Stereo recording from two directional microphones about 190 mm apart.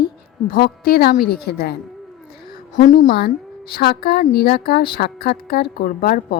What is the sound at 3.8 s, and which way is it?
A woman's voice, 55° left (ahead or behind).